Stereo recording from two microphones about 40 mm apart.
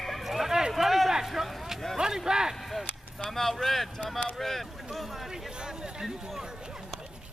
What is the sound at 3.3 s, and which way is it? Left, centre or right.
Speech, centre.